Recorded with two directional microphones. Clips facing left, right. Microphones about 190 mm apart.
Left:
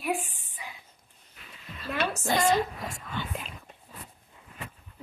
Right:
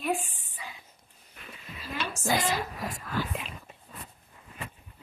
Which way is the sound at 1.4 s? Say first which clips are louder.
Right 5 dB; 50° right (ahead or behind).